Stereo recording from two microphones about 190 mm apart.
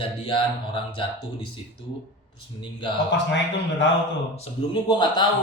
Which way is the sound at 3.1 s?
70° left (ahead or behind).